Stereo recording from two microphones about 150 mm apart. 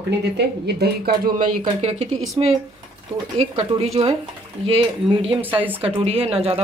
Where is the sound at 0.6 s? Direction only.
90° right.